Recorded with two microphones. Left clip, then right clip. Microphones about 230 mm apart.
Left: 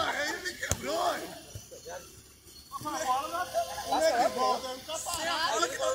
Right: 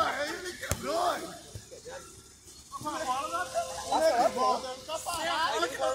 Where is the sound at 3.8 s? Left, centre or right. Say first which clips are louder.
Right 2 dB; left.